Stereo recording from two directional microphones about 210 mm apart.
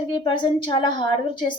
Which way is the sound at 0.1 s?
25° left (ahead or behind).